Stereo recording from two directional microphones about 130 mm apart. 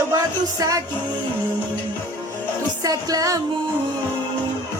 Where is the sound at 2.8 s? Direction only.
30° right (ahead or behind).